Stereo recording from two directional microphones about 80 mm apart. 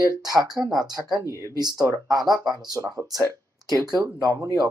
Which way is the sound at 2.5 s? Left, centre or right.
Right.